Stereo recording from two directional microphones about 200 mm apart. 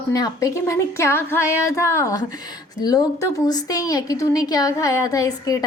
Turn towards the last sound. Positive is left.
turn(degrees=20)  # may be behind; listen again after turning